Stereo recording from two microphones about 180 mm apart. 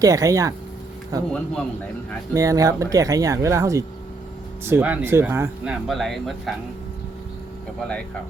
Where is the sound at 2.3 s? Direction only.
20° right (ahead or behind); by 6.5 s centre (ahead or behind).